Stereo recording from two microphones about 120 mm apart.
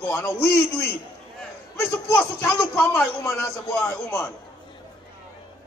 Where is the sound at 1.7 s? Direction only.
15° left (ahead or behind).